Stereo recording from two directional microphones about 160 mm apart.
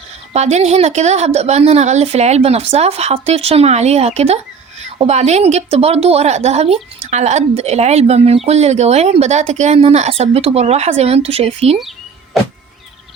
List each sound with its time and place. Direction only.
0.3 s a woman's voice: 45° right (ahead or behind)